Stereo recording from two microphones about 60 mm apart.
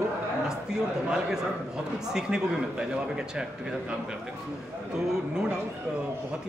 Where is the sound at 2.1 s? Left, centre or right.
Centre.